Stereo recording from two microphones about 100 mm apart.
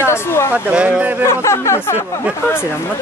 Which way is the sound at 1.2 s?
30° left (ahead or behind).